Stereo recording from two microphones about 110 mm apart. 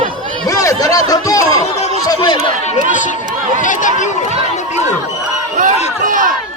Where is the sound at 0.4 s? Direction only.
30° left (ahead or behind).